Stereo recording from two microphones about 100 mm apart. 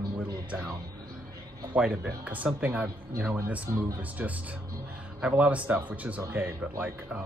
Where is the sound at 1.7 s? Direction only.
10° right (ahead or behind).